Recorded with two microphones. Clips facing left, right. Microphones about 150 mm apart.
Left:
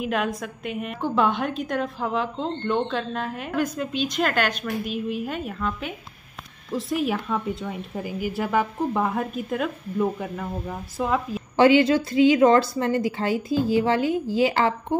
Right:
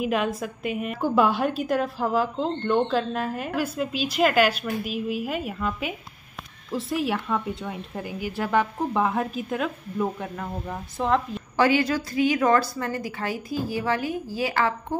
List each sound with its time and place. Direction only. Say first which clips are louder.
0.0 s a woman's voice: right 1 dB; centre (ahead or behind)
11.5 s a woman's voice: left 5 dB; 25° left (ahead or behind)